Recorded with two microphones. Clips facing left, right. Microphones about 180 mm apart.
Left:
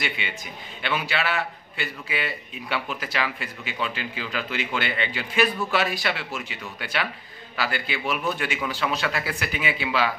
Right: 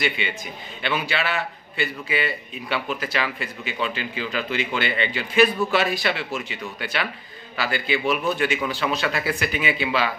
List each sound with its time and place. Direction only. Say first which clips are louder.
0.8 s a man's voice: right 1 dB; 5° left (ahead or behind)
9.0 s speech: right 3 dB; 5° right (ahead or behind)
9.4 s a man's voice: right 3 dB; 5° left (ahead or behind)